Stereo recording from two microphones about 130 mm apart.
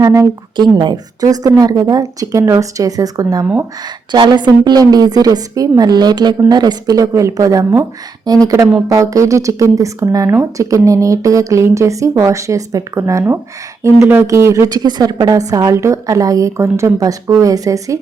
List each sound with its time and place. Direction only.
0.0 s a woman's voice: 25° right (ahead or behind)